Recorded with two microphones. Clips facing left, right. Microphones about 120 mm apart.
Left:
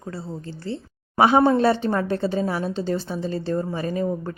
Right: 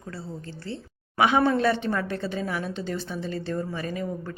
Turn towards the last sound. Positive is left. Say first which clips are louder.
# left 6 dB
turn(degrees=35)  # may be behind; listen again after turning